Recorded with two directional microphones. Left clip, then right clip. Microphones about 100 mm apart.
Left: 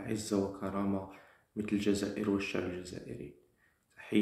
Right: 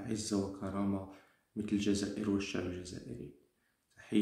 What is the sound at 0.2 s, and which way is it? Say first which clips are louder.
Speech: left 4 dB; 35° right (ahead or behind).